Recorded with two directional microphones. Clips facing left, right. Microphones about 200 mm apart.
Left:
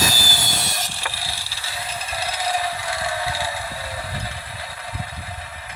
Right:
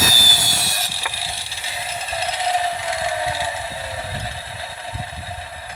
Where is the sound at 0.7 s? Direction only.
5° right (ahead or behind).